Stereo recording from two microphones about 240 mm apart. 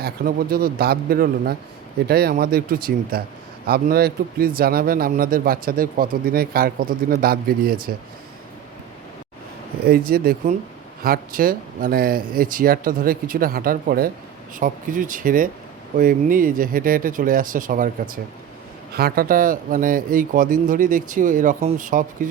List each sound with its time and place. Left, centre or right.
0.0 s a man's voice: right
10.1 s a man's voice: right
18.9 s a man's voice: right